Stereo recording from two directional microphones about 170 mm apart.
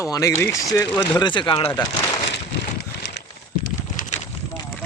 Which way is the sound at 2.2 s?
85° left.